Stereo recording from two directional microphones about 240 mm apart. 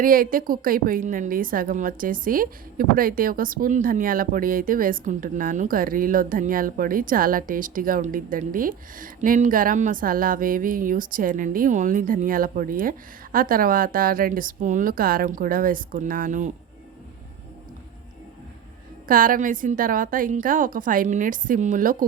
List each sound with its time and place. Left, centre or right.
0.0 s a woman's voice: right
19.0 s a woman's voice: right